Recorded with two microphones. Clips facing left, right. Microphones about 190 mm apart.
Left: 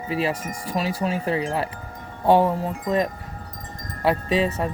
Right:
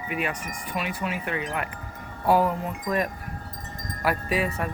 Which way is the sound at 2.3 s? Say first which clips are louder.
Left 4 dB; 25° left (ahead or behind).